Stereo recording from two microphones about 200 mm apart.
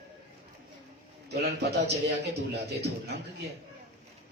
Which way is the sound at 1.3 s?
55° right (ahead or behind).